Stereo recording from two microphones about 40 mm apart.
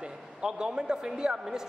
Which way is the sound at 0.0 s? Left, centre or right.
Right.